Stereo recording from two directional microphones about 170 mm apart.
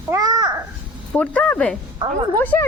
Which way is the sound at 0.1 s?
20° right (ahead or behind).